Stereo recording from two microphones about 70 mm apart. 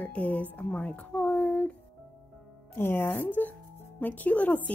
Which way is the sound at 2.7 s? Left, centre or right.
Left.